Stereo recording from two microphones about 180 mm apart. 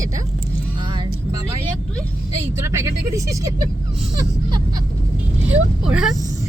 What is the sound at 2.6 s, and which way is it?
Speech, 15° right (ahead or behind).